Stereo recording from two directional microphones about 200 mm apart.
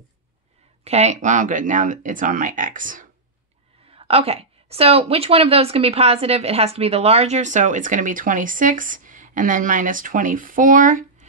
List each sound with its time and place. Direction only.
0.8 s a woman's voice: 35° right (ahead or behind)
3.8 s a woman's voice: 30° right (ahead or behind)